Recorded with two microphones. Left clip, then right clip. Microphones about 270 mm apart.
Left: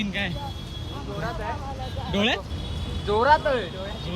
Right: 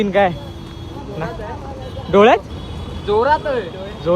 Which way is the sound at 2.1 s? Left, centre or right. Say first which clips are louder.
Right 14 dB; centre.